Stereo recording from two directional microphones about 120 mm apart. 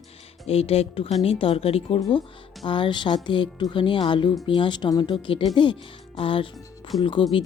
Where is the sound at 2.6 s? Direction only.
45° left (ahead or behind).